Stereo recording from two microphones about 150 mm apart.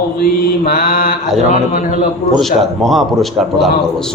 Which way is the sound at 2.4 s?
Centre (ahead or behind).